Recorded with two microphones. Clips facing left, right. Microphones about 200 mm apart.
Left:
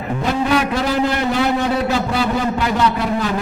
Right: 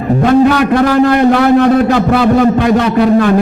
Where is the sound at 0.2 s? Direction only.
60° right (ahead or behind).